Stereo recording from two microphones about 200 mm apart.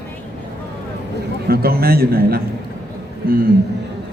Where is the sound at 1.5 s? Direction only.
50° right (ahead or behind).